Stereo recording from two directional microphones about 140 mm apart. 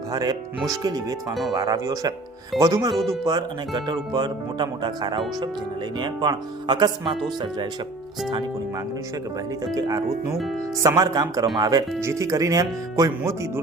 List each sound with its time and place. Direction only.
0.1 s speech: 30° right (ahead or behind)
1.3 s speech: centre (ahead or behind)
1.5 s speech: 25° right (ahead or behind)
9.7 s speech: 25° right (ahead or behind)